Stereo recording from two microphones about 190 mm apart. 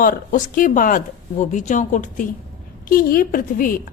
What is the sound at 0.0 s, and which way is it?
A woman's voice, 45° left (ahead or behind).